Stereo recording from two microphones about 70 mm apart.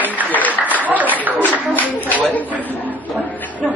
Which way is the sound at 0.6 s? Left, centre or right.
Right.